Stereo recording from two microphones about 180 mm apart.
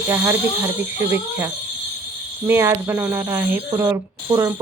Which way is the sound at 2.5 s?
15° right (ahead or behind).